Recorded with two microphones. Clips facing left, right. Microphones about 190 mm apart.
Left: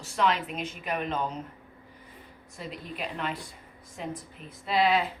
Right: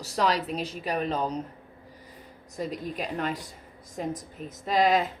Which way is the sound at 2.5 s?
40° right (ahead or behind).